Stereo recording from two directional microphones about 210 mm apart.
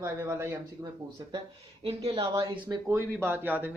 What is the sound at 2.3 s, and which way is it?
Speech, 15° right (ahead or behind).